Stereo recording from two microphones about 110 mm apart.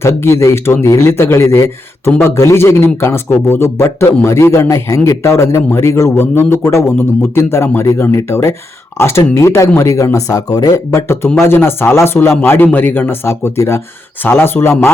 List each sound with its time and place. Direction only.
0.0 s a man's voice: 25° left (ahead or behind)
11.3 s a man's voice: 20° left (ahead or behind)